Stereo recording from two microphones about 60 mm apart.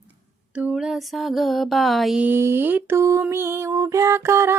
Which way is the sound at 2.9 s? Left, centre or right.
Right.